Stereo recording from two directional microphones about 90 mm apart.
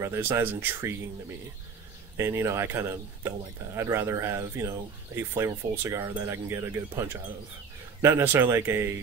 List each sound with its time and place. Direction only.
0.0 s speech: 25° right (ahead or behind)
2.1 s speech: 30° right (ahead or behind)